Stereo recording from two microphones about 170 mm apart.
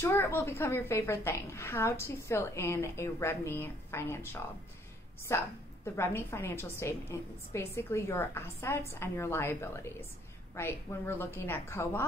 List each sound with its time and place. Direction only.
0.0 s a woman's voice: 10° left (ahead or behind)